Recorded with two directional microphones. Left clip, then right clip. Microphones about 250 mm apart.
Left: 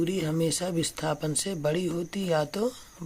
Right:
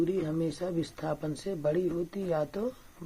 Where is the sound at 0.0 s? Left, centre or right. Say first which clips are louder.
Left 2 dB; left.